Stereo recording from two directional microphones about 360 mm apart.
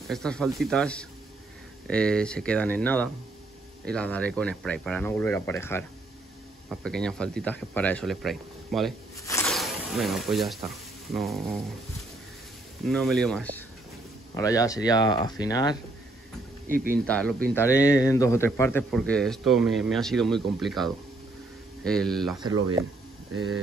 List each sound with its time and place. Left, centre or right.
0.1 s speech: centre
12.8 s speech: centre
16.6 s speech: right
17.0 s speech: centre